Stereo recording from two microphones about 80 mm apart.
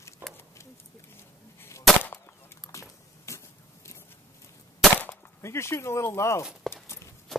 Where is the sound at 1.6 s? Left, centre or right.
Left.